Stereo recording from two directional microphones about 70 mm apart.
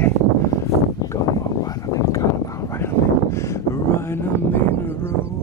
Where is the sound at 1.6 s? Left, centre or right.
Left.